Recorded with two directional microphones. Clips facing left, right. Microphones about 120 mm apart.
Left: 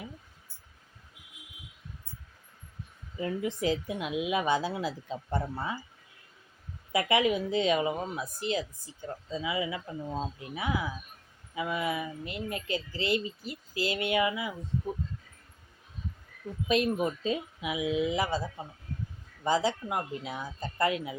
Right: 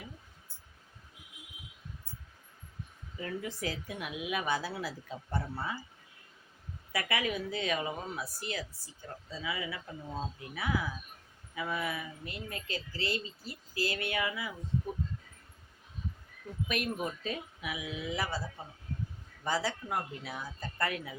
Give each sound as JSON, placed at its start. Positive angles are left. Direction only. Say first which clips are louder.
{"t": 3.2, "sound": "speech", "louder": "left 6 dB", "side_deg": 20}
{"t": 6.9, "sound": "speech", "louder": "left 7 dB", "side_deg": 20}
{"t": 16.6, "sound": "speech", "louder": "left 8 dB", "side_deg": 25}